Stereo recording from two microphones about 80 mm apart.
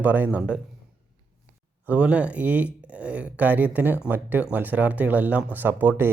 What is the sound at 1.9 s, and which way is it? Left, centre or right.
Speech, centre.